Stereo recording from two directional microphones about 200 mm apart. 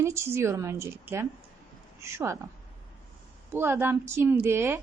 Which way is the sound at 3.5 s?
10° right (ahead or behind).